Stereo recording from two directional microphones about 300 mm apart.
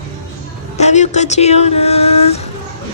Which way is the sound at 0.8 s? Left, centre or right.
Left.